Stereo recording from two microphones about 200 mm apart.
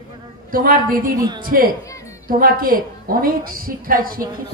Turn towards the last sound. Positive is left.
turn(degrees=-45)  # may be behind; listen again after turning